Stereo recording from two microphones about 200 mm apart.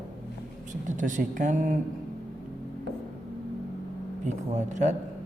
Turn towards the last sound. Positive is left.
turn(degrees=-35)  # may be behind; listen again after turning